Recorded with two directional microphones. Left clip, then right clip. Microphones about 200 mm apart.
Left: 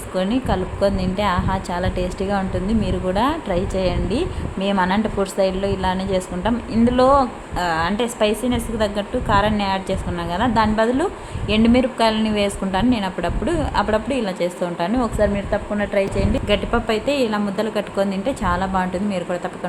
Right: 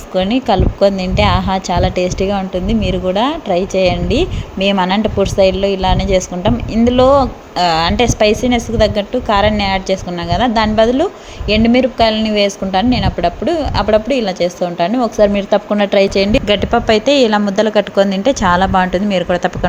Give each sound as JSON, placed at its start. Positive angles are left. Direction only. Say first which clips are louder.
{"t": 0.1, "sound": "speech", "louder": "right 8 dB", "side_deg": -20}
{"t": 15.2, "sound": "speech", "louder": "right 11 dB", "side_deg": -35}